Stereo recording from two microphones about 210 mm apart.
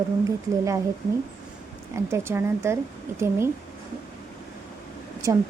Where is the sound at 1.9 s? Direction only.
15° right (ahead or behind).